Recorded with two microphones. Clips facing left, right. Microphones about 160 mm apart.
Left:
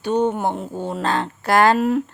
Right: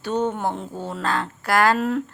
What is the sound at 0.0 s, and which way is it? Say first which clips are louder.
A woman's voice: left 4 dB; 15° left (ahead or behind).